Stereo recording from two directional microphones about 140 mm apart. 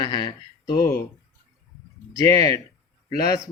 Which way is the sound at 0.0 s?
35° left (ahead or behind).